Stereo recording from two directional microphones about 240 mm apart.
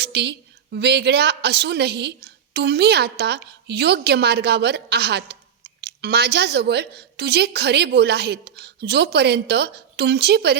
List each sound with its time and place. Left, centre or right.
0.0 s a woman's voice: right